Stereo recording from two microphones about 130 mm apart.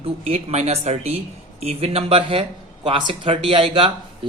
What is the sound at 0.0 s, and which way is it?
Speech, 55° right (ahead or behind).